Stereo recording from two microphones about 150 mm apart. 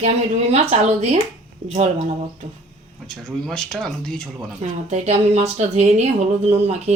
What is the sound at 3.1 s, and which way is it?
Speech, 5° left (ahead or behind).